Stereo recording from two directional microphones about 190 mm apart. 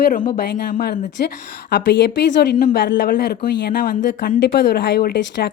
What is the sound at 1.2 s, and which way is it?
Speech, 60° left (ahead or behind).